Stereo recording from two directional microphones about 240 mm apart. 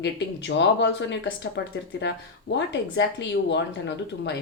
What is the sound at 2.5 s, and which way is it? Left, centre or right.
Speech, left.